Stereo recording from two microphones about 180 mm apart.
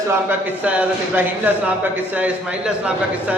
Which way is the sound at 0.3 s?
10° right (ahead or behind).